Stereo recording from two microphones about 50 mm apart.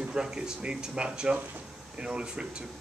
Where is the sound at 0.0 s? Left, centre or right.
Centre.